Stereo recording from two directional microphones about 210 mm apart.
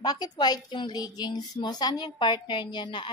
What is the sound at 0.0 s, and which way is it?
Speech, 20° left (ahead or behind).